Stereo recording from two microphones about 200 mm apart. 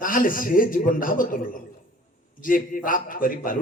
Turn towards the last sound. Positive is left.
turn(degrees=45)  # may be behind; listen again after turning